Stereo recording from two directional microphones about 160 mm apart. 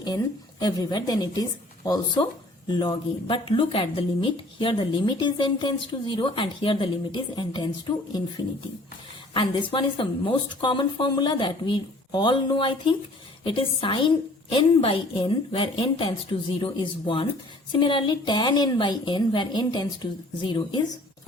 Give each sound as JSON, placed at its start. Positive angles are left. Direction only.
{"t": 0.6, "sound": "a woman's voice", "side_deg": 25}
{"t": 9.3, "sound": "a woman's voice", "side_deg": 30}